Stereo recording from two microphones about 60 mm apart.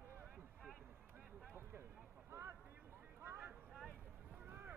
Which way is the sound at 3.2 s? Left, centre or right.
Right.